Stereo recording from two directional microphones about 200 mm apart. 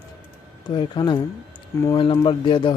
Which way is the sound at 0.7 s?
25° left (ahead or behind).